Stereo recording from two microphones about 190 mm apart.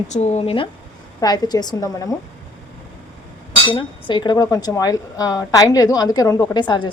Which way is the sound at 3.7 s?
25° left (ahead or behind).